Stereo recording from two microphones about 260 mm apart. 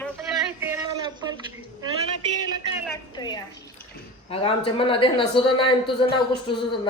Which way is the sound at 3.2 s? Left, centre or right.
Centre.